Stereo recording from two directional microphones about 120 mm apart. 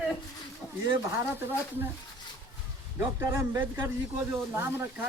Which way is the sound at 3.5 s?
20° right (ahead or behind).